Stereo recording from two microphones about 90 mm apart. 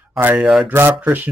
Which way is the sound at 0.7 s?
25° right (ahead or behind).